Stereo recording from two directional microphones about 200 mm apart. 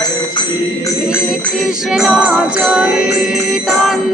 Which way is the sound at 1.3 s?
5° right (ahead or behind).